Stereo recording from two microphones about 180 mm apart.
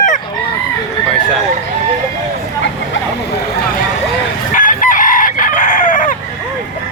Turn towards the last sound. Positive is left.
turn(degrees=45)  # may be behind; listen again after turning